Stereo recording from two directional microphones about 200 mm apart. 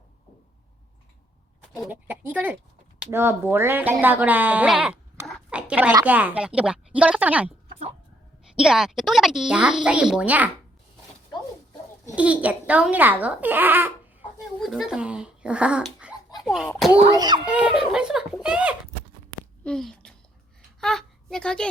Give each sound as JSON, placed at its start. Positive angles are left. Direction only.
{"t": 1.8, "sound": "a child's voice", "side_deg": -10}
{"t": 8.5, "sound": "speech", "side_deg": -5}
{"t": 12.1, "sound": "a child's voice", "side_deg": -5}
{"t": 17.2, "sound": "a child's voice", "side_deg": -20}
{"t": 17.4, "sound": "a woman's voice", "side_deg": -5}